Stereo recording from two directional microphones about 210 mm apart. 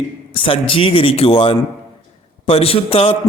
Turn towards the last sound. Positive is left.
turn(degrees=25)  # may be behind; listen again after turning